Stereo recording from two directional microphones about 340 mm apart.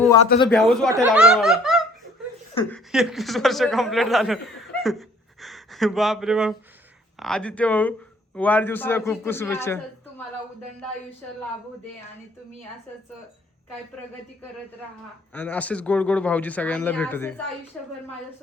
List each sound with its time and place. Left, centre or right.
0.3 s a man's voice: centre
0.6 s a man's voice: centre
15.3 s speech: centre